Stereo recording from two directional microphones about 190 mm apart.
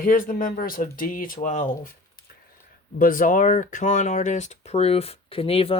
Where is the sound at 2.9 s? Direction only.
45° left (ahead or behind); by 5.8 s 30° left (ahead or behind).